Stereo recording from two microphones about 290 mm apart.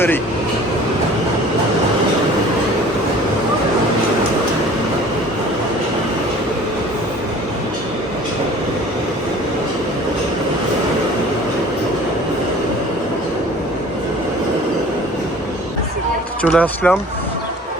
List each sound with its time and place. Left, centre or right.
16.4 s speech: centre